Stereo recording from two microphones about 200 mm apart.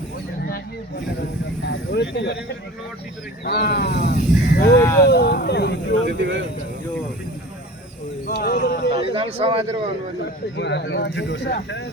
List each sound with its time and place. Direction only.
1.6 s speech: 60° left (ahead or behind)
3.4 s speech: 55° left (ahead or behind)
4.7 s speech: 15° left (ahead or behind)
5.0 s speech: 55° left (ahead or behind)
6.1 s speech: 60° right (ahead or behind)
8.6 s speech: 60° left (ahead or behind)
9.0 s speech: 30° right (ahead or behind)
10.6 s speech: 60° left (ahead or behind)